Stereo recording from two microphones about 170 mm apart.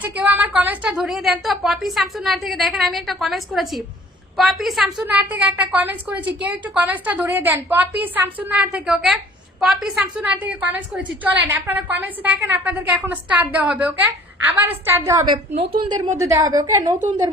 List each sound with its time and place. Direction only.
0.0 s a woman's voice: 10° right (ahead or behind)